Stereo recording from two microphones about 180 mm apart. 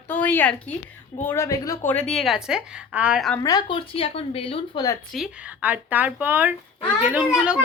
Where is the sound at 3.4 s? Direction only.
20° left (ahead or behind).